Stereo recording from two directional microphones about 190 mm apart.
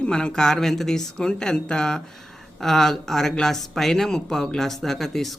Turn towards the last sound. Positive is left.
turn(degrees=0)  # may be behind; listen again after turning